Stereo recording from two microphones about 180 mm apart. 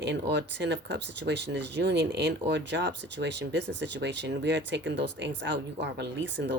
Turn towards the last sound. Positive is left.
turn(degrees=-80)